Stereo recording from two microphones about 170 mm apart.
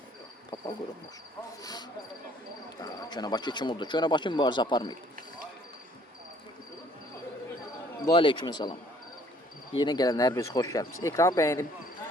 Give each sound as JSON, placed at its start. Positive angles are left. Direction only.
{"t": 0.5, "sound": "insect", "side_deg": 25}
{"t": 2.8, "sound": "speech", "side_deg": 25}
{"t": 8.0, "sound": "speech", "side_deg": 30}
{"t": 9.7, "sound": "speech", "side_deg": 25}